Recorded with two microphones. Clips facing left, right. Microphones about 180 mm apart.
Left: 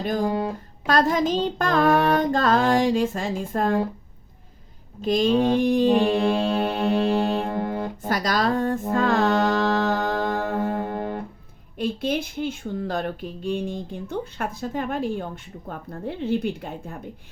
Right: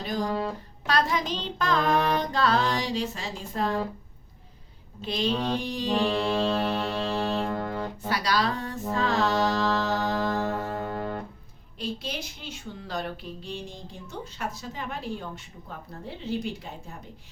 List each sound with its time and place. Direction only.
0.0 s speech: 50° left (ahead or behind)
0.3 s speech: 15° left (ahead or behind)
0.9 s speech: 45° left (ahead or behind)
4.9 s speech: 45° left (ahead or behind)
6.7 s music: 55° left (ahead or behind)
7.6 s music: 15° left (ahead or behind)
8.0 s music: 45° left (ahead or behind)
10.8 s music: 20° left (ahead or behind)
11.8 s speech: 55° left (ahead or behind)